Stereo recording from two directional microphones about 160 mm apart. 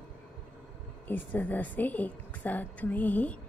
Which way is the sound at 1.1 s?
10° left (ahead or behind).